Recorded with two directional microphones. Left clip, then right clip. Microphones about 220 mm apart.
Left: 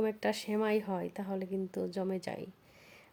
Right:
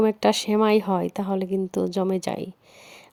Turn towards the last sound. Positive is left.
turn(degrees=-40)  # may be behind; listen again after turning